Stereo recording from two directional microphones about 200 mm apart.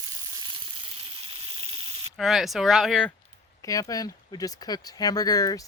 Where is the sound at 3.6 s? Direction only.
15° left (ahead or behind).